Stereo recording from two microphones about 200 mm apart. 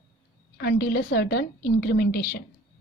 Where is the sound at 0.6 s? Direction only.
50° left (ahead or behind).